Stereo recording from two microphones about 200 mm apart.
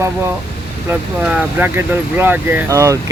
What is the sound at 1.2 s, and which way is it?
Speech, 5° right (ahead or behind).